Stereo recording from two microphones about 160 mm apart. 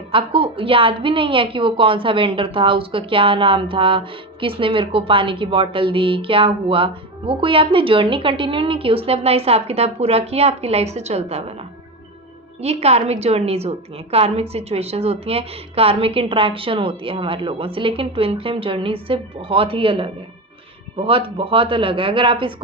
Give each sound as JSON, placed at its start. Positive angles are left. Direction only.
{"t": 0.1, "sound": "a woman's voice", "side_deg": -35}
{"t": 12.6, "sound": "a woman's voice", "side_deg": -40}